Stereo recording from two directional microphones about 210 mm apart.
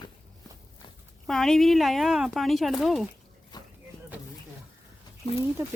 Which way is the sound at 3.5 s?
20° left (ahead or behind).